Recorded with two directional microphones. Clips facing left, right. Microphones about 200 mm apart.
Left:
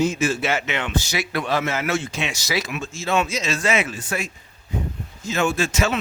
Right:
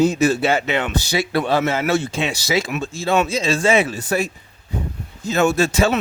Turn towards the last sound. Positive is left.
turn(degrees=-35)  # may be behind; listen again after turning